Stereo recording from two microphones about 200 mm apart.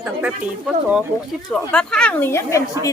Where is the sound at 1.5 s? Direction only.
5° left (ahead or behind).